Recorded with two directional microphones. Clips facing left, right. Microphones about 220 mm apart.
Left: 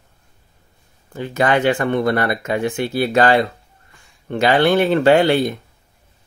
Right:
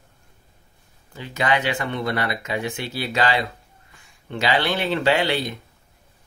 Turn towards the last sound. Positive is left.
turn(degrees=50)  # may be behind; listen again after turning